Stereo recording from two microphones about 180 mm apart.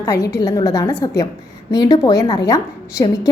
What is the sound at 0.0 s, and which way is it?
A woman's voice, 15° left (ahead or behind).